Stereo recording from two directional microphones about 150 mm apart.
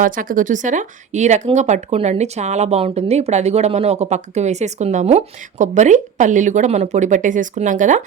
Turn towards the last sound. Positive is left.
turn(degrees=-55)  # may be behind; listen again after turning